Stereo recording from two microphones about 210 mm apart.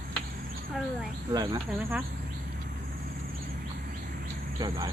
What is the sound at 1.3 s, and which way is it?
Speech, 20° right (ahead or behind).